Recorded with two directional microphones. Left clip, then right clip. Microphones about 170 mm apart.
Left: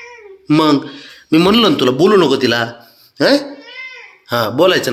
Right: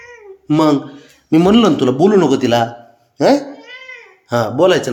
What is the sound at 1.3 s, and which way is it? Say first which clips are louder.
Speech: even; 20° right (ahead or behind).